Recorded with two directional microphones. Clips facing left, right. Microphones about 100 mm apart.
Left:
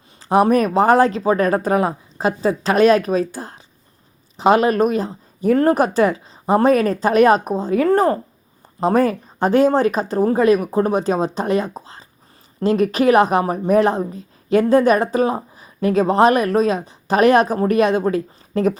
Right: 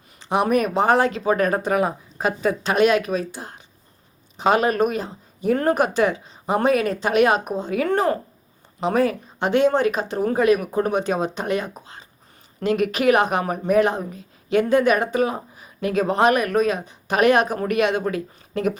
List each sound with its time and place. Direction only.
0.2 s a woman's voice: 40° left (ahead or behind)